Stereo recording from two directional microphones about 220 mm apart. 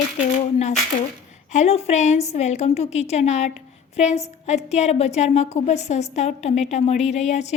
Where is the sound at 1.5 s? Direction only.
30° left (ahead or behind).